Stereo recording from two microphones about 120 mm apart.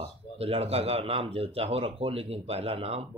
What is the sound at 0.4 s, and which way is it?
Speech, 55° right (ahead or behind).